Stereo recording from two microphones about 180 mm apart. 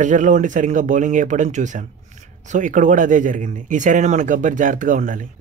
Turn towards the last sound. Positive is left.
turn(degrees=-45)  # may be behind; listen again after turning